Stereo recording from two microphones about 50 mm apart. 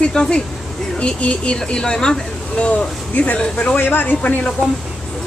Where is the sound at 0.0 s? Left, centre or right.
Centre.